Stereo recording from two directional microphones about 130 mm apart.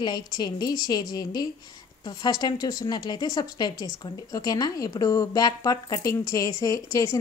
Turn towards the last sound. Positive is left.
turn(degrees=25)  # may be behind; listen again after turning